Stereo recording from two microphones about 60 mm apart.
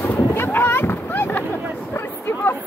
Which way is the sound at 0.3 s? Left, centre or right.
Left.